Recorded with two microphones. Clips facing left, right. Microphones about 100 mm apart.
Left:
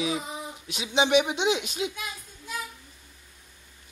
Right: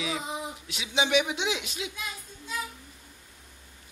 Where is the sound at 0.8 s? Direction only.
25° left (ahead or behind).